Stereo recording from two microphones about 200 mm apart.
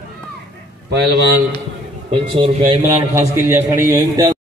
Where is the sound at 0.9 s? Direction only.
55° right (ahead or behind).